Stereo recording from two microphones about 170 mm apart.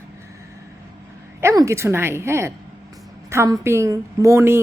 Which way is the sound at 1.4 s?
15° right (ahead or behind).